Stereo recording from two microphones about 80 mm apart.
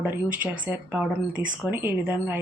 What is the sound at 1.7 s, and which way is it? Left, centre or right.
Speech, right.